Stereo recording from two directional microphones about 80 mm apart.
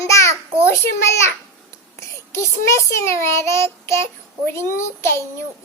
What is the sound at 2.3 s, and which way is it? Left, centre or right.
Child singing, left.